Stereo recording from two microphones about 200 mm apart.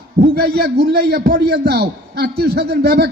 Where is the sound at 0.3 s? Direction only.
55° right (ahead or behind).